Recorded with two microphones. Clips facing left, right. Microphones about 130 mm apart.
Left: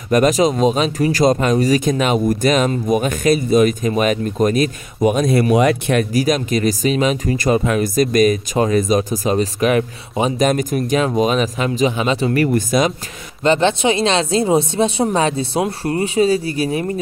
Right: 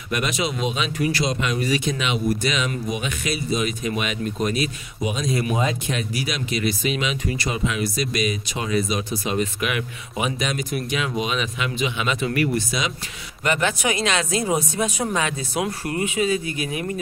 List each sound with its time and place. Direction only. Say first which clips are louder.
0.1 s speech: left 11 dB; 40° left (ahead or behind); by 6.0 s 65° left (ahead or behind)
6.1 s speech: left 10 dB; 45° left (ahead or behind)
10.4 s speech: left 9 dB; 45° left (ahead or behind)
12.5 s speech: left 9 dB; 50° left (ahead or behind)
13.4 s speech: left 8 dB; 30° left (ahead or behind)